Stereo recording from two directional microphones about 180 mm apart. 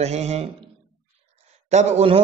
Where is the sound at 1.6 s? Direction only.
40° right (ahead or behind).